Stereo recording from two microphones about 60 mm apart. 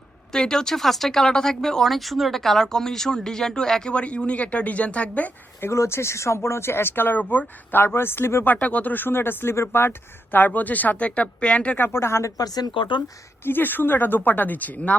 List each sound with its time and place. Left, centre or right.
0.3 s speech: centre
5.5 s a woman's voice: left
8.6 s a woman's voice: left
10.3 s speech: left
11.8 s speech: left
12.4 s speech: left
13.4 s a woman's voice: left